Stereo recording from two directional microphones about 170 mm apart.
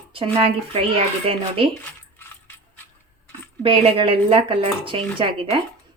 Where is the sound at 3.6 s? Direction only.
30° right (ahead or behind).